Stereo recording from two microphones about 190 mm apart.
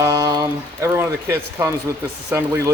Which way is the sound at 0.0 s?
15° right (ahead or behind).